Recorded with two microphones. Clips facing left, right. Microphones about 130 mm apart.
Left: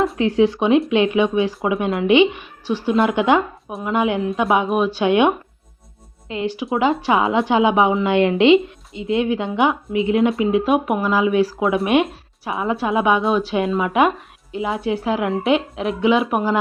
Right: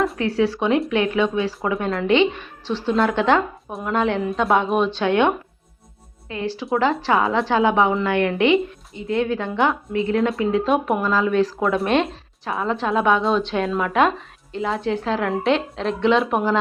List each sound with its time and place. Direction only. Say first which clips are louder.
0.2 s speech: left 4 dB; 20° left (ahead or behind)
3.7 s a woman's voice: left 2 dB; centre (ahead or behind)
3.9 s speech: left 1 dB; 10° left (ahead or behind)
4.2 s a woman's voice: left 1 dB; centre (ahead or behind)